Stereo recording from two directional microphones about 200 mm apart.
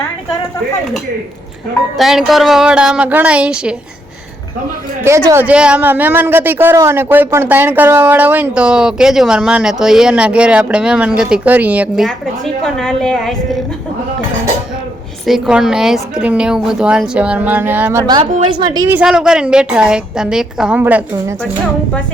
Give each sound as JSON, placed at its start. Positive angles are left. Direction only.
{"t": 2.0, "sound": "a woman's voice", "side_deg": 0}
{"t": 5.0, "sound": "a woman's voice", "side_deg": -15}
{"t": 15.3, "sound": "a woman's voice", "side_deg": -5}
{"t": 18.2, "sound": "a woman's voice", "side_deg": -30}
{"t": 18.9, "sound": "a woman's voice", "side_deg": -5}